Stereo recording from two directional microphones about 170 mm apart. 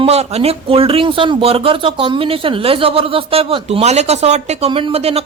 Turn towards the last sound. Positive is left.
turn(degrees=-35)  # may be behind; listen again after turning